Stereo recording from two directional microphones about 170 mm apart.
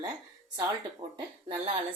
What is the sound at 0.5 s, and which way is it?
Speech, 25° right (ahead or behind).